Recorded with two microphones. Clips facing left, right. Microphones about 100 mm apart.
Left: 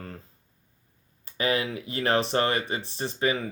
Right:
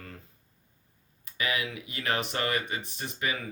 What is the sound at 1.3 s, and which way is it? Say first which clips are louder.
Speech: left 5 dB; 35° left (ahead or behind).